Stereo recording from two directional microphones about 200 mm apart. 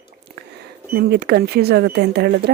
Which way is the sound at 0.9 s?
50° right (ahead or behind).